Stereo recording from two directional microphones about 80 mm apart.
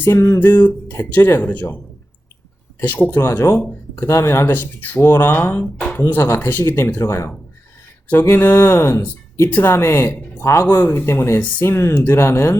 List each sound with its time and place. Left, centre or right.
0.3 s speech: left
2.8 s speech: left
3.2 s speech: left
4.5 s speech: left
8.2 s speech: left
10.4 s speech: left